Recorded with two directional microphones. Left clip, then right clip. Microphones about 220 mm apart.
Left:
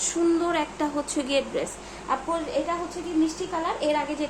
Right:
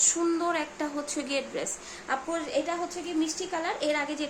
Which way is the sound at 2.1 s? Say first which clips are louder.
Left 3 dB; 10° right (ahead or behind).